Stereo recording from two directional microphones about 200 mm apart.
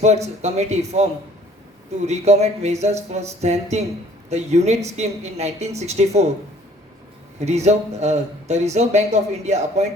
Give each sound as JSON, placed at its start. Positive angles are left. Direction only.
{"t": 0.4, "sound": "speech", "side_deg": -35}
{"t": 7.3, "sound": "speech", "side_deg": -35}